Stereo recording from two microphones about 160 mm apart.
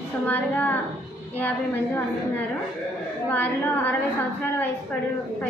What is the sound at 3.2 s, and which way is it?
Speech, 10° left (ahead or behind).